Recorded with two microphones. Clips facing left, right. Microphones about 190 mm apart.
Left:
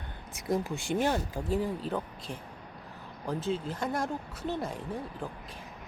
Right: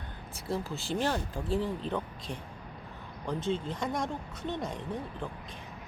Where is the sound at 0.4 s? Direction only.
15° left (ahead or behind).